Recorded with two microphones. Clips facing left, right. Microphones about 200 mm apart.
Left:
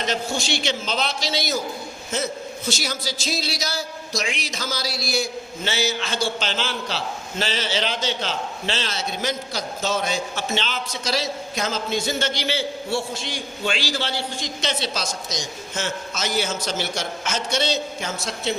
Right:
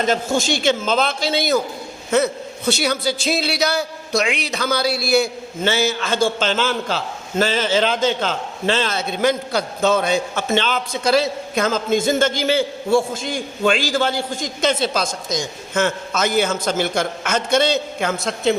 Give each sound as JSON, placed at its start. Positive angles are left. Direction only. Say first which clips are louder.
{"t": 0.0, "sound": "a man's voice", "louder": "right 6 dB", "side_deg": -50}